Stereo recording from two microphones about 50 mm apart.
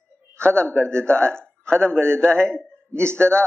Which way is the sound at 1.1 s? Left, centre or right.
Centre.